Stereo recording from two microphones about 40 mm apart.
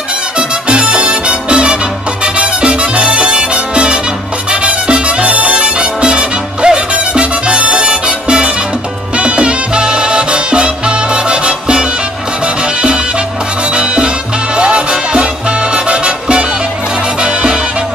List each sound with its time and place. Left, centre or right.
0.4 s music: right
13.7 s music: right